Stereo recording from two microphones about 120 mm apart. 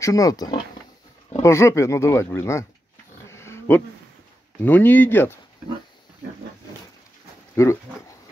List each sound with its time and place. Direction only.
0.0 s speech: 30° left (ahead or behind)
3.3 s dog: 20° left (ahead or behind)
4.6 s speech: 15° left (ahead or behind)
7.5 s speech: 25° left (ahead or behind)